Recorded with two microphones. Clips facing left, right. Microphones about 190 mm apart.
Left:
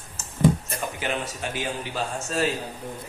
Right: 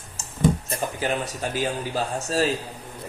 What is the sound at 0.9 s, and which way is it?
A man's voice, 40° right (ahead or behind).